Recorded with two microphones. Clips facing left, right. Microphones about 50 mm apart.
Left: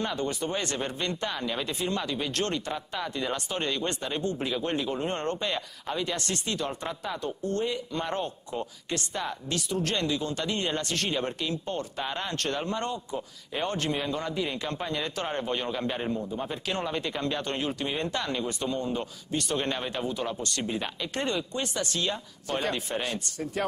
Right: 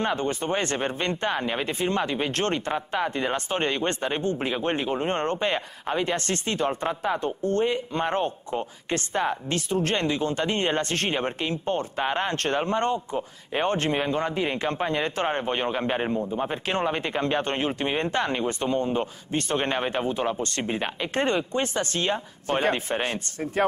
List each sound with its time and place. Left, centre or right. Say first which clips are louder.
0.0 s speech: right 4 dB; right